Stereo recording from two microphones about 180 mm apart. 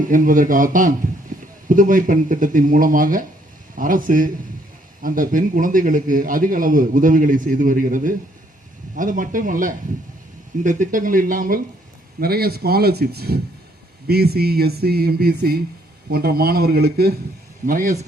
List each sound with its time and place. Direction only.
0.0 s a man's voice: 50° right (ahead or behind)
17.7 s a man's voice: 45° right (ahead or behind)